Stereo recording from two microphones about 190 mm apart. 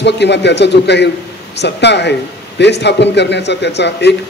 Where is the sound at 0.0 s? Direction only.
65° left (ahead or behind).